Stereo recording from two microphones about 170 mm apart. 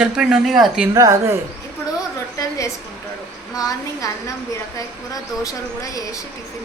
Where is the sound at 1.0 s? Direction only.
15° right (ahead or behind).